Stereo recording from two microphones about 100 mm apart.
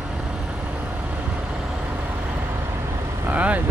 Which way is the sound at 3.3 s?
15° right (ahead or behind).